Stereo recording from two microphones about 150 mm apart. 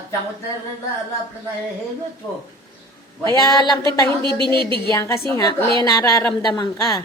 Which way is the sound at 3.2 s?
25° left (ahead or behind).